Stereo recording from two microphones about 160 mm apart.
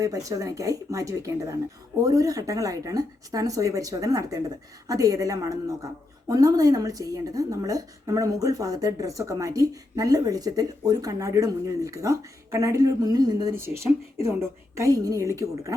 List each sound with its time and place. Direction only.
0.0 s speech: 20° right (ahead or behind)